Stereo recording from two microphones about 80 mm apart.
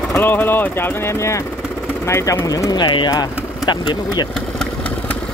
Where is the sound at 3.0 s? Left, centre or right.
Left.